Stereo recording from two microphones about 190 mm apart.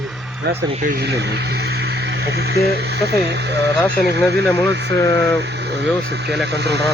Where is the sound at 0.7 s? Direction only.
45° right (ahead or behind).